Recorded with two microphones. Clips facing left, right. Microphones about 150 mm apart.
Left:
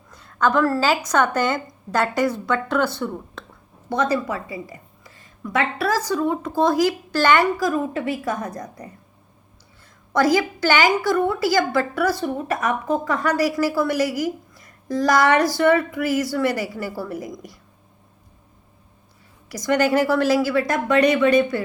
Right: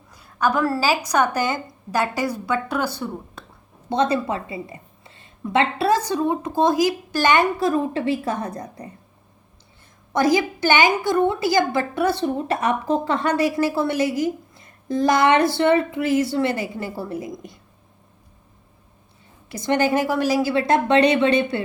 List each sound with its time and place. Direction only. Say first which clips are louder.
0.1 s a woman's voice: left 2 dB; 10° right (ahead or behind)
3.8 s a woman's voice: right 1 dB; 25° right (ahead or behind)
7.6 s a woman's voice: right 2 dB; 30° right (ahead or behind)
10.1 s a woman's voice: even; 20° right (ahead or behind)
19.5 s a woman's voice: left 1 dB; 25° right (ahead or behind)